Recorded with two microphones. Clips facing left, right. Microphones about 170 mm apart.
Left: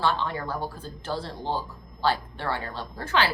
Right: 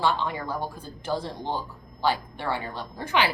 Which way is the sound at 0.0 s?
15° right (ahead or behind).